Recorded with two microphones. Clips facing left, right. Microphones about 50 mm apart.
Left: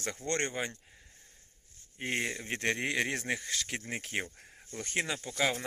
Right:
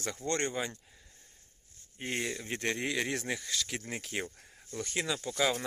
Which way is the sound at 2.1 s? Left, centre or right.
Left.